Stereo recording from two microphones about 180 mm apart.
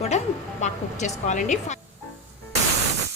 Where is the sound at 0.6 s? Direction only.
40° left (ahead or behind).